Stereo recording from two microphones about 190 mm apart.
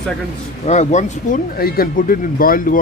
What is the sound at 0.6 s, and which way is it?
Speech, 35° left (ahead or behind).